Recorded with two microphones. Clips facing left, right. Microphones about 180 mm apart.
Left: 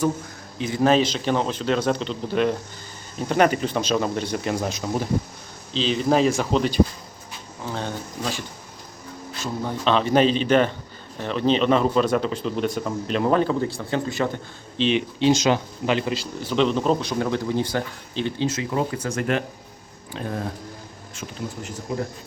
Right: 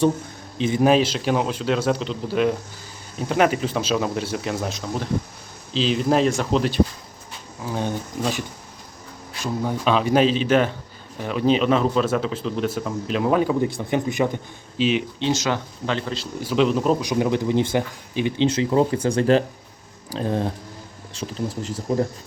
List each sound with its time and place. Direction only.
0.6 s a man's voice: 20° right (ahead or behind)
0.9 s speech: 5° right (ahead or behind)
7.6 s speech: 10° right (ahead or behind)
14.8 s speech: 5° right (ahead or behind)
15.2 s speech: 15° left (ahead or behind)
16.4 s speech: 5° right (ahead or behind)
17.1 s speech: 15° right (ahead or behind)
18.4 s speech: 30° right (ahead or behind)